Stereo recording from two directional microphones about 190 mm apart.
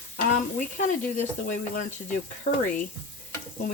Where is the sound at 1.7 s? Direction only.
40° left (ahead or behind).